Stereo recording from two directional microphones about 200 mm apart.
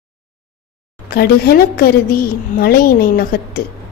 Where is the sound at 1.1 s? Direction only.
50° left (ahead or behind).